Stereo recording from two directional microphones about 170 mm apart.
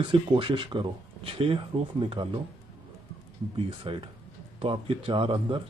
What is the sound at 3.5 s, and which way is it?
Speech, 30° right (ahead or behind).